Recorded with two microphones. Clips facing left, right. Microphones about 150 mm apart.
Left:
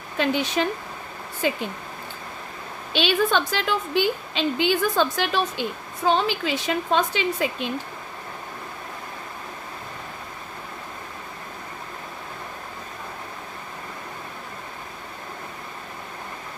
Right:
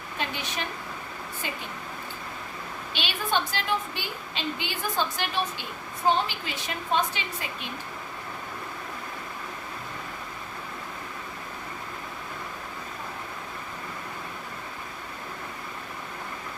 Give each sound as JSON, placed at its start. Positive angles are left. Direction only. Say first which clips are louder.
{"t": 0.2, "sound": "a woman's voice", "louder": "left 11 dB", "side_deg": 90}
{"t": 2.9, "sound": "a woman's voice", "louder": "left 8 dB", "side_deg": 90}